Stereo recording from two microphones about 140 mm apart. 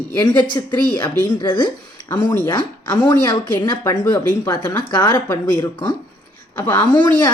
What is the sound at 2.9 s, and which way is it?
Speech, 30° left (ahead or behind).